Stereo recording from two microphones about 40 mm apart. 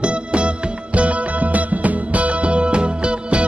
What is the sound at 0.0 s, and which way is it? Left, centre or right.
Music, right.